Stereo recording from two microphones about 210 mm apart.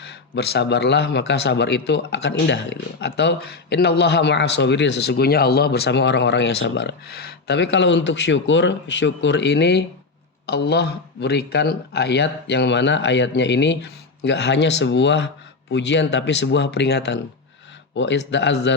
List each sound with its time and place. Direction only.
0.0 s a man's voice: 50° left (ahead or behind)